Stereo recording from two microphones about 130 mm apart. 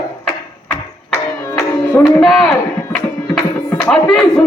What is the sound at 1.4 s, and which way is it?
Tabla, 15° left (ahead or behind).